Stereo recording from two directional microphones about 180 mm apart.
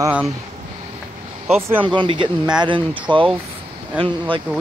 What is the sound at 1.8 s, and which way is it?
Speech, 25° right (ahead or behind).